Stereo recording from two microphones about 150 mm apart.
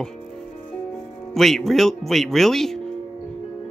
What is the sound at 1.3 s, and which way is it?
A man's voice, centre (ahead or behind).